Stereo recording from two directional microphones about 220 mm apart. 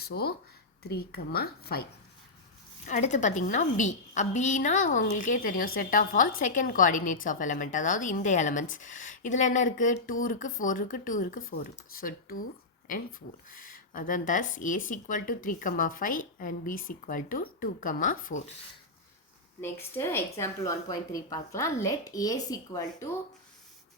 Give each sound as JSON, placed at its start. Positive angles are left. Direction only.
{"t": 0.0, "sound": "a woman's voice", "side_deg": 45}
{"t": 2.8, "sound": "speech", "side_deg": 35}
{"t": 13.5, "sound": "speech", "side_deg": 40}
{"t": 19.6, "sound": "a woman's voice", "side_deg": 10}